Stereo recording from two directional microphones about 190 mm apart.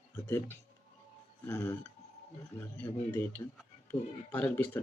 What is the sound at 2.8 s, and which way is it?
Speech, 10° left (ahead or behind).